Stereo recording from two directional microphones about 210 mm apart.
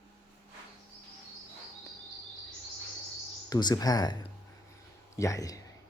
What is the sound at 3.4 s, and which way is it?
Speech, 20° left (ahead or behind).